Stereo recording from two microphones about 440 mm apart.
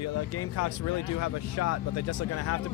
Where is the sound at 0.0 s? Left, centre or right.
Left.